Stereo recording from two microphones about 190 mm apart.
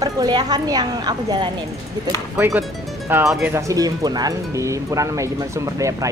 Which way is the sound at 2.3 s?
10° right (ahead or behind).